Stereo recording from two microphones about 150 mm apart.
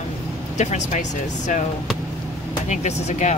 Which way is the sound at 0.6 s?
50° left (ahead or behind).